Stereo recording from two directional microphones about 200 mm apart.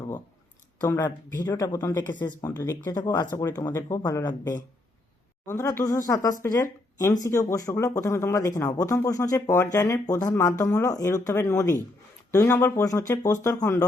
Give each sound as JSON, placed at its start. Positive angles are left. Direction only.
{"t": 0.9, "sound": "speech", "side_deg": 15}